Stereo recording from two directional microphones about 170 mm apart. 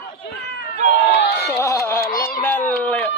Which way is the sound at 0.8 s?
80° left.